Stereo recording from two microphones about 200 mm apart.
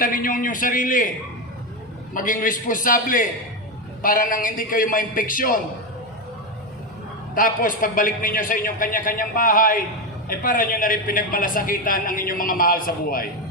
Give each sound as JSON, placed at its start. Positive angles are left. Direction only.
{"t": 0.0, "sound": "a woman's voice", "side_deg": 45}
{"t": 2.1, "sound": "a woman's voice", "side_deg": 45}
{"t": 7.3, "sound": "a woman's voice", "side_deg": 45}